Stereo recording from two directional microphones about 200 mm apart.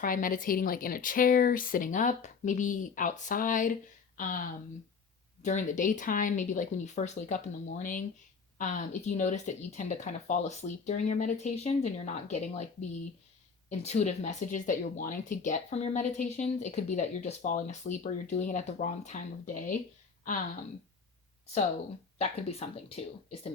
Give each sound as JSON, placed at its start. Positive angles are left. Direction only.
{"t": 0.0, "sound": "a woman's voice", "side_deg": 45}
{"t": 13.7, "sound": "speech", "side_deg": 35}
{"t": 22.2, "sound": "speech", "side_deg": 30}